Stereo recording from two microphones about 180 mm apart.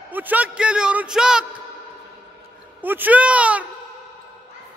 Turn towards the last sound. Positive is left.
turn(degrees=-5)  # may be behind; listen again after turning